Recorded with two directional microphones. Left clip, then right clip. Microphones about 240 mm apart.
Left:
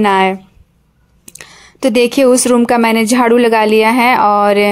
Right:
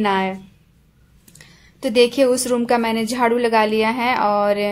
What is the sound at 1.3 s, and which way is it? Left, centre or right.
A woman's voice, left.